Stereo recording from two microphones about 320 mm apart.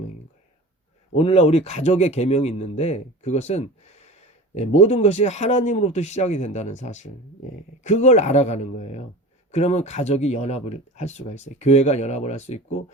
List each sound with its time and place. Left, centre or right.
1.1 s speech: centre